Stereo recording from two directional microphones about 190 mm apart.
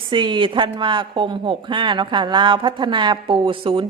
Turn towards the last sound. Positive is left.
turn(degrees=-25)  # may be behind; listen again after turning